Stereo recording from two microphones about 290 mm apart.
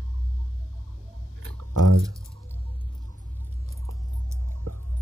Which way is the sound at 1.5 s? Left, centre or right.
Right.